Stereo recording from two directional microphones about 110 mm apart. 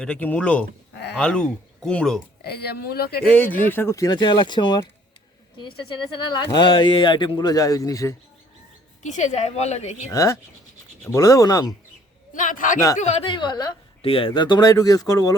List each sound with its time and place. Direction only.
0.0 s speech: 10° left (ahead or behind)
3.2 s speech: 15° left (ahead or behind)
3.9 s speech: 35° left (ahead or behind)
9.0 s a woman's voice: 90° left
10.1 s speech: 25° left (ahead or behind)
13.0 s a woman's voice: 90° left
13.2 s speech: 45° left (ahead or behind)
14.0 s speech: 55° left (ahead or behind); by 15.4 s 35° left (ahead or behind)